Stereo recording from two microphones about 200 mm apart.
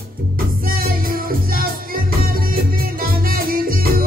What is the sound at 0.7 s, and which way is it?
Music, 45° right (ahead or behind).